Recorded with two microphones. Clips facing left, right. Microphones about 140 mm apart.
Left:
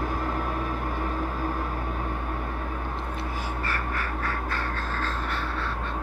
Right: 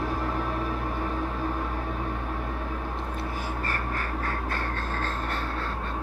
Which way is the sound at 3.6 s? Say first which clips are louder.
Even; 40° right (ahead or behind).